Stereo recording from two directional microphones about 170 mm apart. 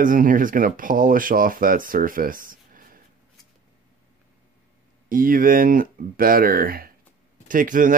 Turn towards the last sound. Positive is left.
turn(degrees=-50)  # may be behind; listen again after turning